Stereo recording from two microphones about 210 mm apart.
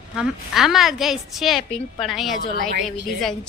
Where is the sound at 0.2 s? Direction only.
Centre (ahead or behind).